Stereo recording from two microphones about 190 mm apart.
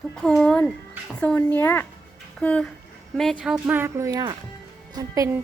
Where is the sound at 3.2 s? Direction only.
Centre (ahead or behind); by 5.3 s 20° right (ahead or behind).